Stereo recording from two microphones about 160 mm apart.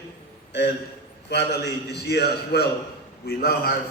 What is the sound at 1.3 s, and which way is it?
A man's voice, 90° left.